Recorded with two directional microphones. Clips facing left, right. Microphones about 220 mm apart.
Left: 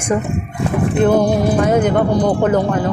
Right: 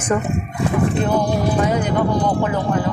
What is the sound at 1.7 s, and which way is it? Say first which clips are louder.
Speech: left 6 dB; 50° left (ahead or behind).